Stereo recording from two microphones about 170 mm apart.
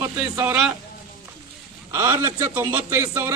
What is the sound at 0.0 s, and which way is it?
Speech, 15° right (ahead or behind).